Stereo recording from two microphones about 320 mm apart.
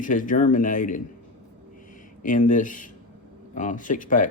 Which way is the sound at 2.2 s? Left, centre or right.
Left.